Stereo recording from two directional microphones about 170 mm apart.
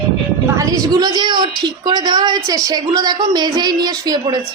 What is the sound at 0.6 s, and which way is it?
A woman's voice, 20° right (ahead or behind).